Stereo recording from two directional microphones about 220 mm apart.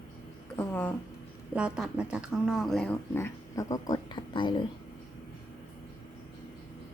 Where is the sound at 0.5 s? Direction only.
5° left (ahead or behind).